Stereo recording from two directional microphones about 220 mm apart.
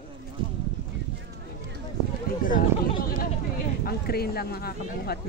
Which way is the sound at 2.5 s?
40° left (ahead or behind).